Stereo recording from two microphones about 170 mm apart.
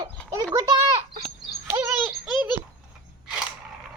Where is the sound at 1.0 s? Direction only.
40° right (ahead or behind).